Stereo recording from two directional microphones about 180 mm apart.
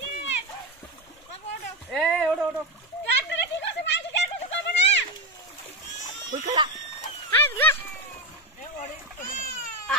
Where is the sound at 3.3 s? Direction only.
75° left (ahead or behind).